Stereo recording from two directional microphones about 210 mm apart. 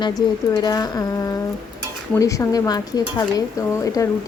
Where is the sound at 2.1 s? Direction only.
15° left (ahead or behind).